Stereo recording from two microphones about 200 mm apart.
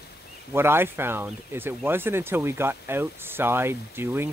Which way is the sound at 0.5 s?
10° right (ahead or behind).